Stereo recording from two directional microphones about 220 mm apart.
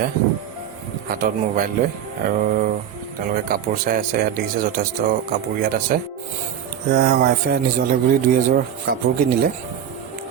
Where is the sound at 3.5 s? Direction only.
40° right (ahead or behind).